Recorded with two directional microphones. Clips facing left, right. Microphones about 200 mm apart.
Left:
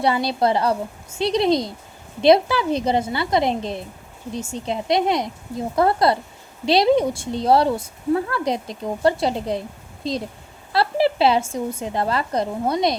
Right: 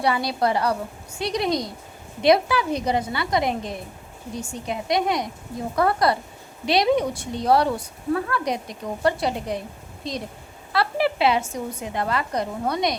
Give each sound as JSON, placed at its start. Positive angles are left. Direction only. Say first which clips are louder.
{"t": 0.0, "sound": "a woman's voice", "louder": "left 3 dB", "side_deg": 25}